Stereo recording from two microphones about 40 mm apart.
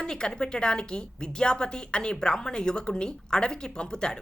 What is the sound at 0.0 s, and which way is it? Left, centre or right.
A woman's voice, left.